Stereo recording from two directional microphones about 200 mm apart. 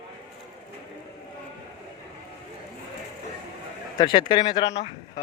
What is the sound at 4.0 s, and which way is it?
Speech, 25° left (ahead or behind).